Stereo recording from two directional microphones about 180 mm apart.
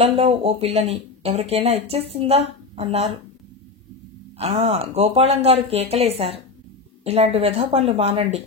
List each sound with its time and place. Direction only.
0.0 s speech: 35° right (ahead or behind)
4.4 s speech: 35° right (ahead or behind)